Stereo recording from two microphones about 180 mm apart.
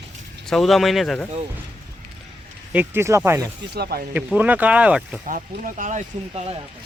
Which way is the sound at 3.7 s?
65° right (ahead or behind).